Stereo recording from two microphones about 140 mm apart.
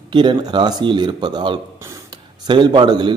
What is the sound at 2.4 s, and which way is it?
Speech, 35° right (ahead or behind).